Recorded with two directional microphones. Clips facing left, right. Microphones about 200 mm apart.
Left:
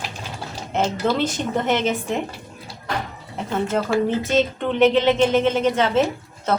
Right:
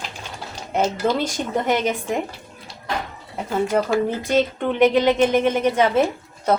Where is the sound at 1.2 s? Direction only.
10° right (ahead or behind).